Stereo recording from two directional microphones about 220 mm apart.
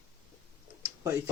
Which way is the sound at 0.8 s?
15° right (ahead or behind).